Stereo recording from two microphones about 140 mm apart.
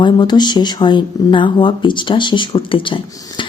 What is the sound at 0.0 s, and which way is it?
A woman's voice, 30° left (ahead or behind).